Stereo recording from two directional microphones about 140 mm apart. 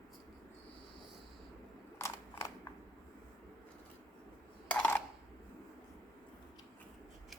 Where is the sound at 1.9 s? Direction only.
20° left (ahead or behind).